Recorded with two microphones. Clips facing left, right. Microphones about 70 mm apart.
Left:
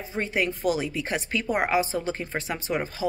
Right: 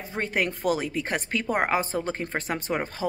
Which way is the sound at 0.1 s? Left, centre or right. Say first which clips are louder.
Even; right.